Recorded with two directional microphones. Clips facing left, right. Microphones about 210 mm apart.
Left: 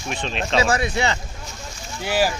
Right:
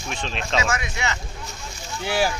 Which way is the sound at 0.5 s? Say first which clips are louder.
Left 6 dB; 35° left (ahead or behind).